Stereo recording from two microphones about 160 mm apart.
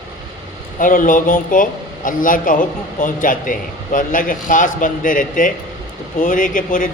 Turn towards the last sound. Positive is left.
turn(degrees=55)  # may be behind; listen again after turning